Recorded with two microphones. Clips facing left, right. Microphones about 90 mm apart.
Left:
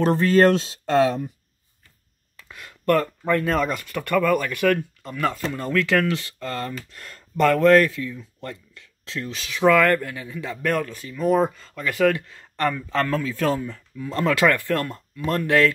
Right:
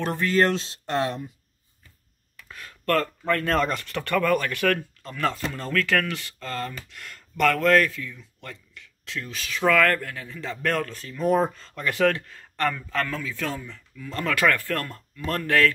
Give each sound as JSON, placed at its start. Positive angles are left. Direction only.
{"t": 0.0, "sound": "speech", "side_deg": 30}
{"t": 2.5, "sound": "speech", "side_deg": 15}
{"t": 5.6, "sound": "speech", "side_deg": 15}
{"t": 6.9, "sound": "speech", "side_deg": 35}
{"t": 7.4, "sound": "speech", "side_deg": 20}
{"t": 9.0, "sound": "speech", "side_deg": 25}
{"t": 12.2, "sound": "a man's voice", "side_deg": 15}
{"t": 13.1, "sound": "speech", "side_deg": 35}